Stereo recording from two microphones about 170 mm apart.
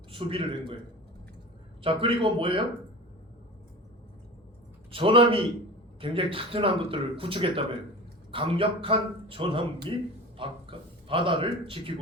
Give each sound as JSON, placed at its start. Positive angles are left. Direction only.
{"t": 0.1, "sound": "a man's voice", "side_deg": -30}
{"t": 1.8, "sound": "a man's voice", "side_deg": -30}
{"t": 4.9, "sound": "a man's voice", "side_deg": -30}